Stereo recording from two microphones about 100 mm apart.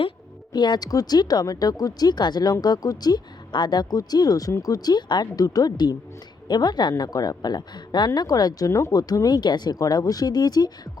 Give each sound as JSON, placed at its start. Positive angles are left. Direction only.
{"t": 0.5, "sound": "a woman's voice", "side_deg": 45}